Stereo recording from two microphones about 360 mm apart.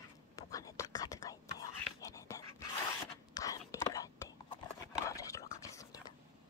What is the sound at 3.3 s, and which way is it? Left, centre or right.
Whispering, centre.